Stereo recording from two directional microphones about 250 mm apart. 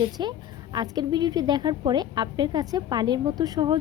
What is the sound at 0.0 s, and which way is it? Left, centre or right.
A woman's voice, centre.